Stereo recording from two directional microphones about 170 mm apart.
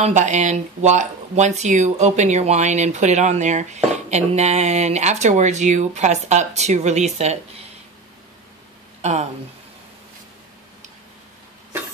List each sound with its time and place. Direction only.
0.0 s speech: 45° right (ahead or behind)
9.0 s speech: 40° right (ahead or behind)